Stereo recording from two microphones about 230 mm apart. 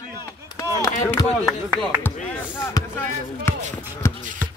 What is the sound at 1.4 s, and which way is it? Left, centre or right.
Speech, centre.